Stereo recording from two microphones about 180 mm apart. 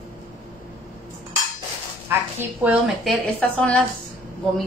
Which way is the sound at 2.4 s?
10° right (ahead or behind).